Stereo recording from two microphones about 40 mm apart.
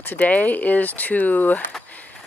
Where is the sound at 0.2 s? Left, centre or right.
Left.